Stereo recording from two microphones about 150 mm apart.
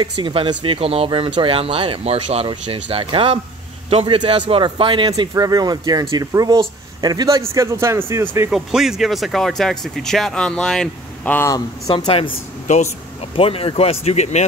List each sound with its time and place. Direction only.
0.0 s speech: 35° right (ahead or behind); by 8.5 s 15° right (ahead or behind)
8.5 s speech: 5° right (ahead or behind)
11.9 s speech: 35° left (ahead or behind)
12.6 s speech: 50° left (ahead or behind)
13.4 s speech: 40° left (ahead or behind)